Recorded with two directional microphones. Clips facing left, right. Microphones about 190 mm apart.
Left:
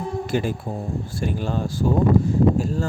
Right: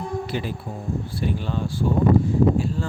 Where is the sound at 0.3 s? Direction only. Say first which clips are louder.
Left 5 dB; 45° left (ahead or behind).